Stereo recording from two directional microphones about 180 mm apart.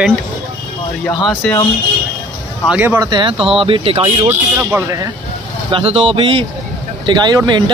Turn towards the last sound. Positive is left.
turn(degrees=-25)  # may be behind; listen again after turning